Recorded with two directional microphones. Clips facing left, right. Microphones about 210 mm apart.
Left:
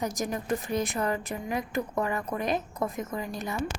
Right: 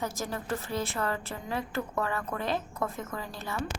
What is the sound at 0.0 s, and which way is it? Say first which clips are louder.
A woman's voice: left 3 dB; 15° left (ahead or behind).